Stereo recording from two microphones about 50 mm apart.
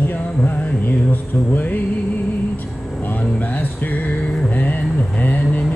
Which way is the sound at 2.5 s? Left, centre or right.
Left.